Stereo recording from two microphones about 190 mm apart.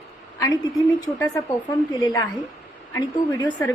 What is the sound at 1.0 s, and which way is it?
A woman's voice, 20° left (ahead or behind).